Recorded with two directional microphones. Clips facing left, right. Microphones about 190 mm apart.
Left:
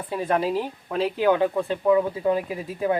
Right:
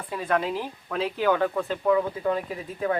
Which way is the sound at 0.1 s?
25° left (ahead or behind).